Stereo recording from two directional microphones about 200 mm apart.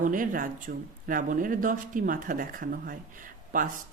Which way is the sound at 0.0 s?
40° right (ahead or behind).